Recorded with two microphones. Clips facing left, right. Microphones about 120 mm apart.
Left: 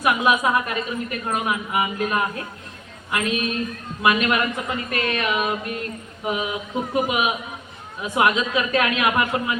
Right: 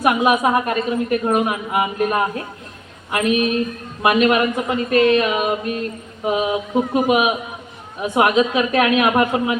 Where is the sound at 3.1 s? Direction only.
25° right (ahead or behind).